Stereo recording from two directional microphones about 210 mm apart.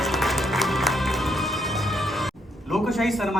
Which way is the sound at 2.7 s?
Centre (ahead or behind).